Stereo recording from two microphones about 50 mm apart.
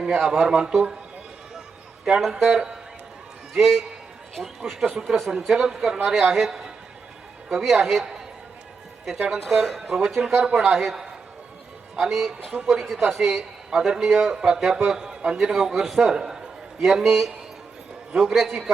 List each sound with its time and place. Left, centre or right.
0.0 s a man's voice: centre
2.3 s a man's voice: centre
3.5 s a man's voice: centre
9.3 s speech: centre
10.4 s a man's voice: centre
10.7 s a man's voice: centre
16.1 s a sound: centre
16.8 s speech: centre